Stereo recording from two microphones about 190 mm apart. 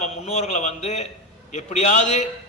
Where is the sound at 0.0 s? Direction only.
35° left (ahead or behind).